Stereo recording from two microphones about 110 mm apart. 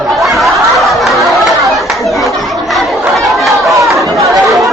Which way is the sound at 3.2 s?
Centre (ahead or behind).